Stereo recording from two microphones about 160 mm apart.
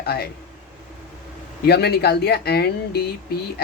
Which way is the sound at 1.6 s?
85° left.